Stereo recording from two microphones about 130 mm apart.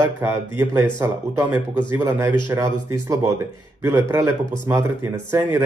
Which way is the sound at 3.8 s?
15° right (ahead or behind).